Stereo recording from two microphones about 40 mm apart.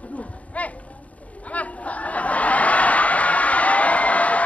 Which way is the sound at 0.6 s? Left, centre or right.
Left.